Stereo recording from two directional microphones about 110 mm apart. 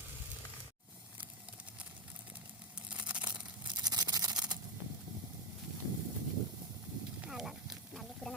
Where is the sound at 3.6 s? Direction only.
35° right (ahead or behind).